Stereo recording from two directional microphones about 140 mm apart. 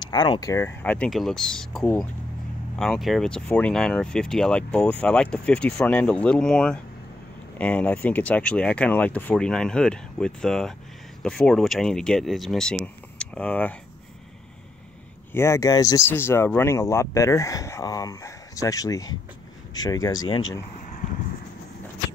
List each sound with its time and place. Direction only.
0.0 s speech: 30° left (ahead or behind); by 13.7 s 10° left (ahead or behind)
15.3 s speech: 20° left (ahead or behind)